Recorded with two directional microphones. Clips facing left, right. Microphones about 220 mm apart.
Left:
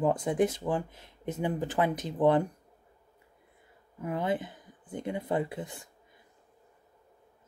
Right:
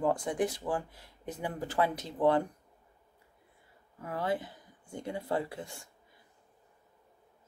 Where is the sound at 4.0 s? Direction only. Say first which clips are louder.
Left 3 dB; 20° left (ahead or behind).